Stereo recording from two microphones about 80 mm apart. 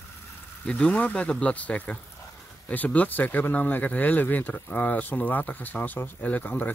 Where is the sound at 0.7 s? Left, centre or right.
Centre.